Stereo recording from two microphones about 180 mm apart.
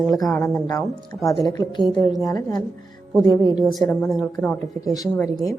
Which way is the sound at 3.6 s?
Centre (ahead or behind).